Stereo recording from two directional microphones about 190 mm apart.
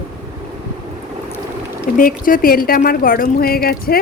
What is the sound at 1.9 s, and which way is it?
Speech, 45° left (ahead or behind).